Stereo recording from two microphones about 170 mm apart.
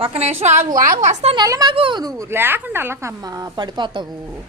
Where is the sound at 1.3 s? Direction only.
20° right (ahead or behind).